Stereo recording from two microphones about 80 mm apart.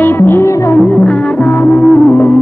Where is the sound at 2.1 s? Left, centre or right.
Left.